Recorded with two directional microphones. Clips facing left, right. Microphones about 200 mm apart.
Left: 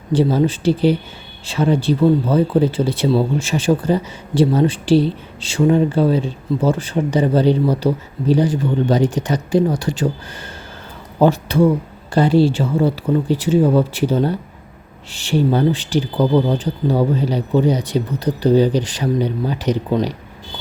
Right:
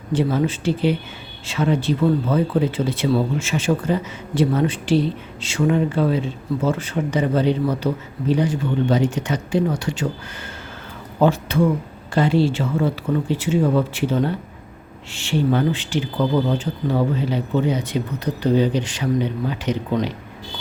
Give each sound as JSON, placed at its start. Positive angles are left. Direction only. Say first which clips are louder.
{"t": 0.1, "sound": "speech", "louder": "left 4 dB", "side_deg": 35}
{"t": 11.2, "sound": "speech", "louder": "left 4 dB", "side_deg": 35}